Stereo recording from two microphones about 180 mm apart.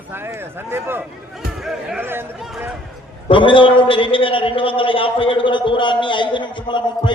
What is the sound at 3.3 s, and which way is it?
A man's voice, 30° left (ahead or behind).